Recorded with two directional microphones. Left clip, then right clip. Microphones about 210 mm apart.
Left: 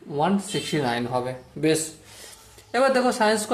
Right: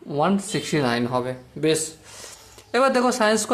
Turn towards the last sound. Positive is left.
turn(degrees=-20)  # may be behind; listen again after turning